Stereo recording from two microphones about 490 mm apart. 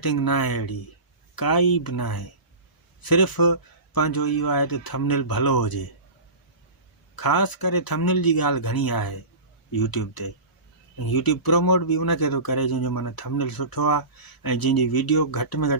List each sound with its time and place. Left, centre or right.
0.0 s speech: left
7.2 s speech: left